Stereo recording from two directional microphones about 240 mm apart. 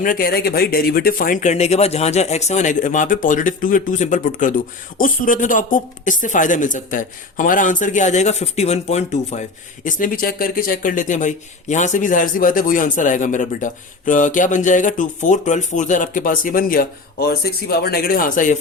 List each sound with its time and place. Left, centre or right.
0.0 s speech: left